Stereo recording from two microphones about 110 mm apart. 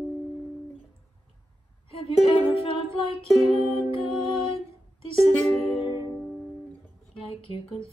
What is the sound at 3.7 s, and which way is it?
Music, 55° left (ahead or behind).